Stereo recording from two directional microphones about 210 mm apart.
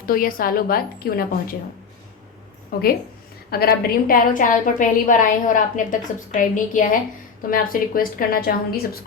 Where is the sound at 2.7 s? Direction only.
45° left (ahead or behind).